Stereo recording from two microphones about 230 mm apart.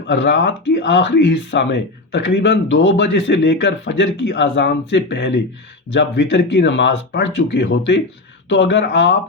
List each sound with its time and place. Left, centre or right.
0.1 s speech: left